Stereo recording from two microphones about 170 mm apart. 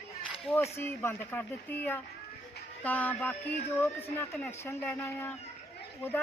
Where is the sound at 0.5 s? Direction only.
15° left (ahead or behind).